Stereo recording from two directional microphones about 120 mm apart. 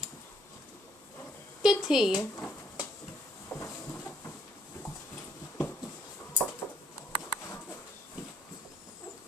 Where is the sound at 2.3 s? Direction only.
20° left (ahead or behind).